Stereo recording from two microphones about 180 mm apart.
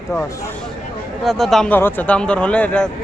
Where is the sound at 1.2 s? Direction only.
Centre (ahead or behind).